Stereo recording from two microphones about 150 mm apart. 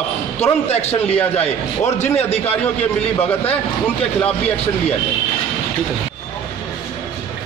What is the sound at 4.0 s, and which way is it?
Speech, 10° left (ahead or behind).